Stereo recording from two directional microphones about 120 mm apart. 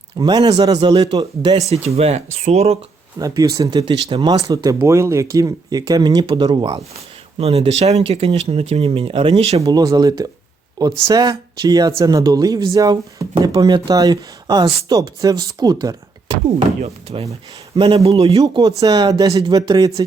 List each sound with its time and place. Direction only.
0.2 s speech: 35° right (ahead or behind)
1.7 s speech: 60° right (ahead or behind)
3.2 s speech: 30° right (ahead or behind)
3.9 s speech: 45° right (ahead or behind)
4.4 s speech: 30° right (ahead or behind)
7.3 s speech: 55° right (ahead or behind)
9.6 s speech: 30° right (ahead or behind)
16.8 s speech: 60° right (ahead or behind)
17.7 s speech: 45° right (ahead or behind)
18.4 s speech: 30° right (ahead or behind)